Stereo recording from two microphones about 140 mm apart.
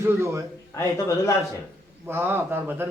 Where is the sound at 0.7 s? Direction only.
20° left (ahead or behind).